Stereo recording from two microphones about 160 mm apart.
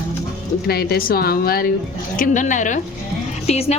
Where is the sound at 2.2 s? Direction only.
50° left (ahead or behind).